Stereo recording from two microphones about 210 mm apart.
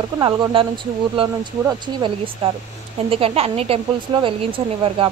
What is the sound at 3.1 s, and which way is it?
Speech, 25° right (ahead or behind).